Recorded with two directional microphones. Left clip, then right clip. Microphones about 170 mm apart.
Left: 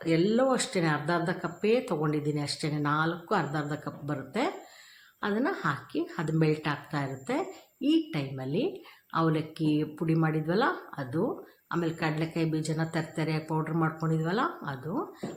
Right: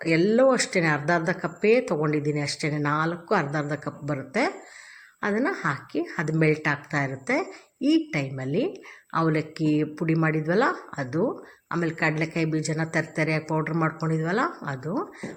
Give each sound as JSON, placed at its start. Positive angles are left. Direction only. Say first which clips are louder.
{"t": 0.0, "sound": "speech", "louder": "right 6 dB", "side_deg": -20}